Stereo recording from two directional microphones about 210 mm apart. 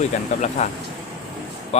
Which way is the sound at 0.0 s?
35° left (ahead or behind).